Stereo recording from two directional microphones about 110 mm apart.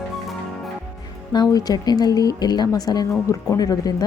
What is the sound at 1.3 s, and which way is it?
Speech, 35° left (ahead or behind).